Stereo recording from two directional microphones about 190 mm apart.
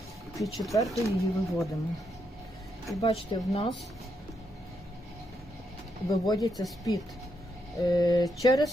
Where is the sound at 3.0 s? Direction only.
30° left (ahead or behind).